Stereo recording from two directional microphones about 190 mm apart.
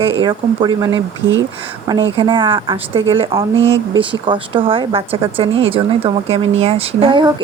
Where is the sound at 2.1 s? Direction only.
25° right (ahead or behind).